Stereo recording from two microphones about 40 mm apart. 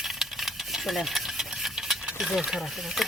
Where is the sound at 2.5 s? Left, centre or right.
Centre.